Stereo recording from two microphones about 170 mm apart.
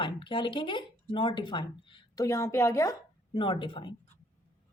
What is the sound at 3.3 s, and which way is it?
Speech, 30° left (ahead or behind).